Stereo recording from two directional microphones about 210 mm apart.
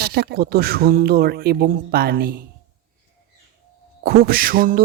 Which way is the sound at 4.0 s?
45° right (ahead or behind).